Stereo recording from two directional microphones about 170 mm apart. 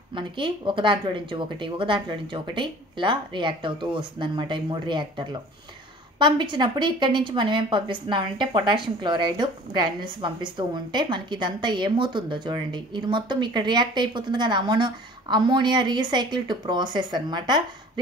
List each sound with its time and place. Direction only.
0.1 s a woman's voice: 30° right (ahead or behind)